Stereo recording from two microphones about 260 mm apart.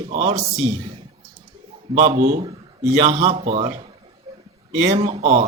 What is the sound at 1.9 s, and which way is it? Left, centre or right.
Speech, right.